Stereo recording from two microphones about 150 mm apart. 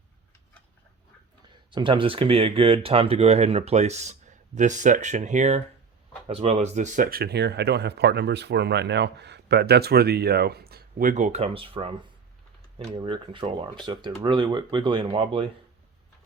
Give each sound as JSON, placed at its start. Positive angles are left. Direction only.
{"t": 1.7, "sound": "speech", "side_deg": -35}
{"t": 13.0, "sound": "speech", "side_deg": -35}